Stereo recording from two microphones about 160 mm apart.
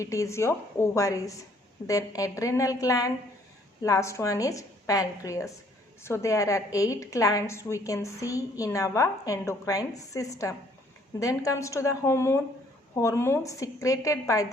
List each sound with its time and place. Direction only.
0.0 s a woman's voice: 20° left (ahead or behind)